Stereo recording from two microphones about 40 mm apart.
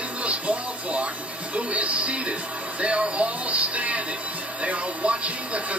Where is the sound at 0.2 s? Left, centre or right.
Right.